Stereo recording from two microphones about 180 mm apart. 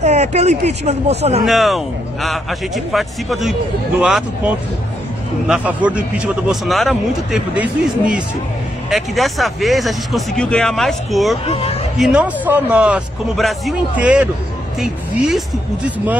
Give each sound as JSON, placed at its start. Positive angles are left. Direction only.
{"t": 0.0, "sound": "speech", "side_deg": -40}
{"t": 1.4, "sound": "speech", "side_deg": 0}
{"t": 11.4, "sound": "speech", "side_deg": 35}
{"t": 12.0, "sound": "speech", "side_deg": -5}